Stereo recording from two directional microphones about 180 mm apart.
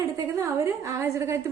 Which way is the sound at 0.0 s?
15° right (ahead or behind).